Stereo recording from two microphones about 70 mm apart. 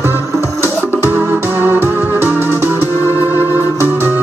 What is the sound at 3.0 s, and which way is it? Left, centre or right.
Music, left.